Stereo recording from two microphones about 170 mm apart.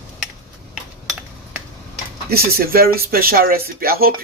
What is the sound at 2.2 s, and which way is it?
Speech, 65° right (ahead or behind).